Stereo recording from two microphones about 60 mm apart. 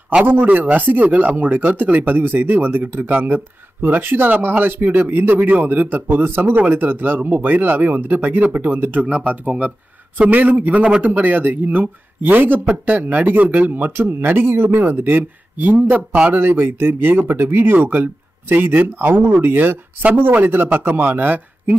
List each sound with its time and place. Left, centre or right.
0.2 s speech: right
9.0 s speech: centre